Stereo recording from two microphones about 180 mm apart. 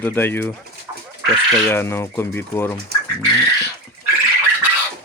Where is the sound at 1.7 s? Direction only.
15° left (ahead or behind).